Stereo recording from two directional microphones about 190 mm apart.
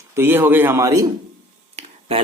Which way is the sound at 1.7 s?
30° right (ahead or behind).